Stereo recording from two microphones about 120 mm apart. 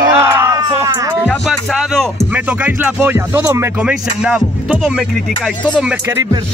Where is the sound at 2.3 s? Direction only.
10° right (ahead or behind).